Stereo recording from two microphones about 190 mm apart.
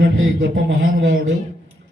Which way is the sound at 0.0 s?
60° right (ahead or behind).